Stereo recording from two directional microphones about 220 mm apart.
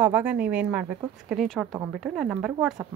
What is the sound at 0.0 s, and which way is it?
Speech, 5° right (ahead or behind).